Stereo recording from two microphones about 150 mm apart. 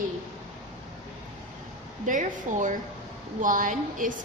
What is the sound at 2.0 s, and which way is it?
A woman's voice, 60° right (ahead or behind).